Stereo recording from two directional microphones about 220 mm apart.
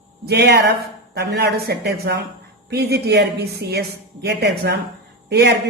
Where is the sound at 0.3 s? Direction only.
50° right (ahead or behind).